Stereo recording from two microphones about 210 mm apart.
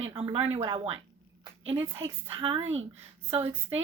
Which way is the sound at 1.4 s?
25° right (ahead or behind).